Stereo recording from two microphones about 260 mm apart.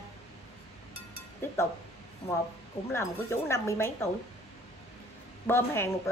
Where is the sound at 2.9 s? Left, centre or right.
Centre.